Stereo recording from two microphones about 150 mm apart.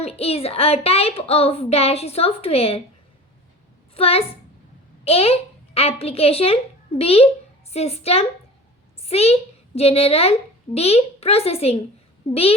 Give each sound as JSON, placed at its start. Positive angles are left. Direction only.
{"t": 0.0, "sound": "speech", "side_deg": 40}
{"t": 3.9, "sound": "a woman's voice", "side_deg": 40}